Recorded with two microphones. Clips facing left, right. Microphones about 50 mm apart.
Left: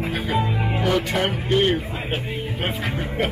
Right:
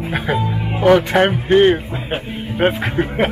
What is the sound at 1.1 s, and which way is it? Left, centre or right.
Speech, right.